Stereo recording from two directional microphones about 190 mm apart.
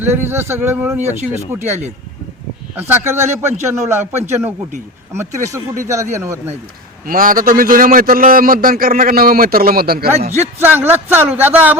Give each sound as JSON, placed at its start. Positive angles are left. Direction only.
{"t": 0.0, "sound": "a man's voice", "side_deg": -10}
{"t": 2.7, "sound": "a man's voice", "side_deg": -10}
{"t": 7.1, "sound": "a man's voice", "side_deg": -50}
{"t": 10.6, "sound": "a man's voice", "side_deg": -10}